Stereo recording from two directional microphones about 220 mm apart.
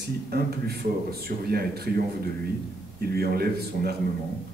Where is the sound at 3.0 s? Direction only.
45° right (ahead or behind).